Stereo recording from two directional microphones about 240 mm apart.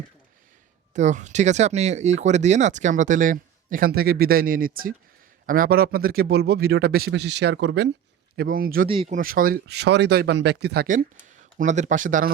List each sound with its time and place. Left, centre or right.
0.9 s speech: right
8.4 s speech: right
8.9 s speech: right
9.1 s speech: right